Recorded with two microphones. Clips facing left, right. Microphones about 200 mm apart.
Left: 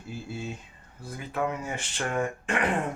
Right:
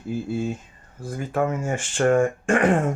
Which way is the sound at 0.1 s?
50° right (ahead or behind).